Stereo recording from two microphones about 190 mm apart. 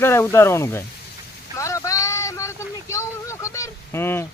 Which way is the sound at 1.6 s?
15° left (ahead or behind).